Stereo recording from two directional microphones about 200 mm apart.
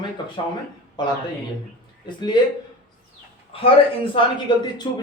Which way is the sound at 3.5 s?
25° left (ahead or behind).